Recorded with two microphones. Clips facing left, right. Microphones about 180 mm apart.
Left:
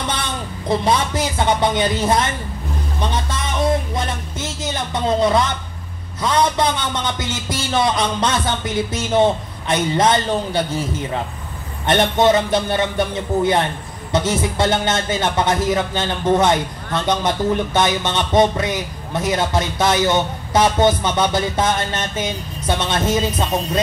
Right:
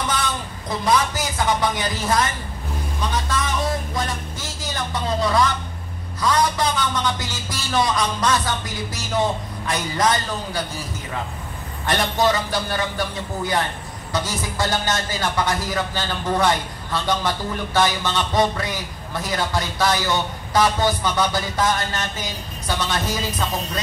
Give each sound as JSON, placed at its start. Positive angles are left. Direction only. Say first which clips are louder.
{"t": 0.1, "sound": "speech", "louder": "even", "side_deg": 25}
{"t": 3.0, "sound": "a sound", "louder": "even", "side_deg": 25}
{"t": 6.2, "sound": "a man's voice", "louder": "left 3 dB", "side_deg": 25}